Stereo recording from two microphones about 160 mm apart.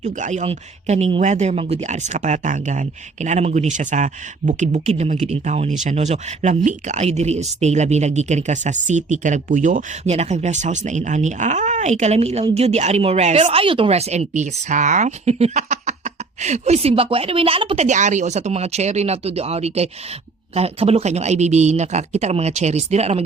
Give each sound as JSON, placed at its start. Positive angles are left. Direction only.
{"t": 0.0, "sound": "speech", "side_deg": -50}
{"t": 17.8, "sound": "speech", "side_deg": -50}